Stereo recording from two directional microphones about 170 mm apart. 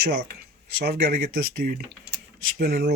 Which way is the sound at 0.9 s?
70° right (ahead or behind).